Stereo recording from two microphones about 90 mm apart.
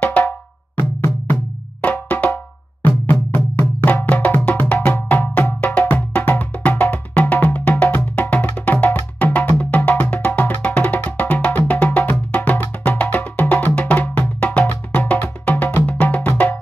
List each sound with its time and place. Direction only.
0.0 s drum: 15° left (ahead or behind)
0.7 s music: 20° left (ahead or behind)